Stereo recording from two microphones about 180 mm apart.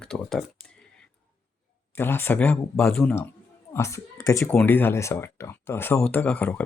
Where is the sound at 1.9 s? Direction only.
10° left (ahead or behind).